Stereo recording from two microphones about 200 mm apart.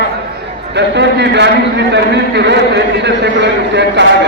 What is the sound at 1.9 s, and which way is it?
A man's voice, 60° right (ahead or behind).